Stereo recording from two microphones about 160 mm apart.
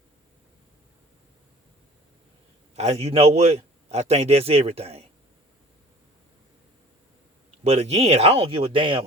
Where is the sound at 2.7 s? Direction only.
40° right (ahead or behind).